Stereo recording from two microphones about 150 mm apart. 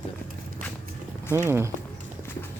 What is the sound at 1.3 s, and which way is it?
Speech, 15° right (ahead or behind).